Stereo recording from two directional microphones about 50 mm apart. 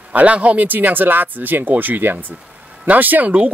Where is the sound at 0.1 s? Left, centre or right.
Right.